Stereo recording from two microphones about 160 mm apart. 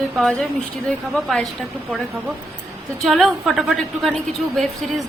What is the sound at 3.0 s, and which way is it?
Speech, centre (ahead or behind).